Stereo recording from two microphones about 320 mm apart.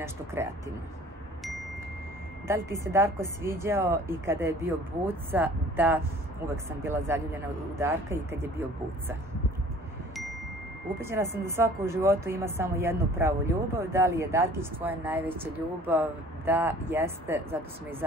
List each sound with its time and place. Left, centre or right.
0.0 s speech: centre
2.4 s speech: centre
11.0 s speech: centre